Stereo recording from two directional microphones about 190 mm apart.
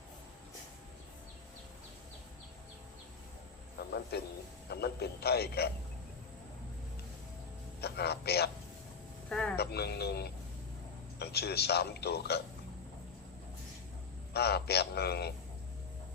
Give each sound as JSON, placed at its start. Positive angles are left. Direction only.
{"t": 3.8, "sound": "a sound", "side_deg": 55}
{"t": 4.7, "sound": "a man's voice", "side_deg": 55}
{"t": 7.8, "sound": "a man's voice", "side_deg": 60}
{"t": 9.3, "sound": "speech", "side_deg": 5}
{"t": 9.6, "sound": "a man's voice", "side_deg": 60}
{"t": 14.3, "sound": "a man's voice", "side_deg": 60}